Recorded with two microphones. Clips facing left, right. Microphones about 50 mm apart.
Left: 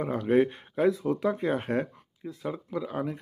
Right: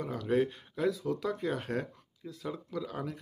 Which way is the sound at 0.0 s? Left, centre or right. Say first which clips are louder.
Left 6 dB; left.